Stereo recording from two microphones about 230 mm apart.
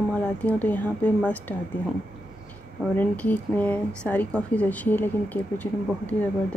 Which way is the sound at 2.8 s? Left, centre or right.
Centre.